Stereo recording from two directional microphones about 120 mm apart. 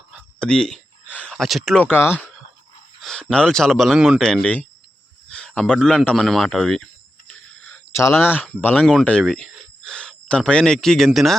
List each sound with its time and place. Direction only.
0.3 s speech: 5° left (ahead or behind)
3.0 s speech: 5° left (ahead or behind)
4.2 s speech: 5° left (ahead or behind)
7.9 s speech: 20° left (ahead or behind); by 11.3 s centre (ahead or behind)